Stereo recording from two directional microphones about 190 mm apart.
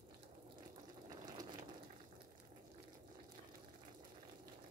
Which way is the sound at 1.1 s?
20° right (ahead or behind).